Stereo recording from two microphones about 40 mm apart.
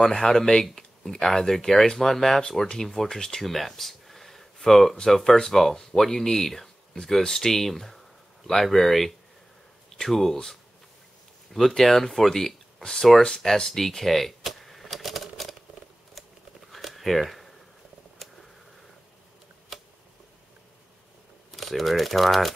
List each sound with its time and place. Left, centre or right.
0.0 s speech: centre
3.4 s a sound: centre
5.1 s speech: centre
13.6 s typewriter: centre
16.7 s a sound: centre
21.5 s speech: centre